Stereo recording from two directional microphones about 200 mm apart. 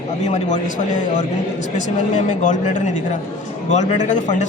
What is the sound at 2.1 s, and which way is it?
A man's voice, 40° left (ahead or behind).